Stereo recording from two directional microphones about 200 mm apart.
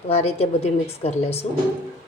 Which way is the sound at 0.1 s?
30° left (ahead or behind).